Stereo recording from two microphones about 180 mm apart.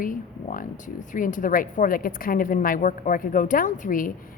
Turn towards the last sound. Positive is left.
turn(degrees=45)  # may be behind; listen again after turning